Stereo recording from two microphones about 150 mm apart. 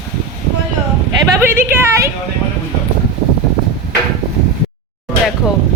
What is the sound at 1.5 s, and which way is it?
Speech, 15° right (ahead or behind).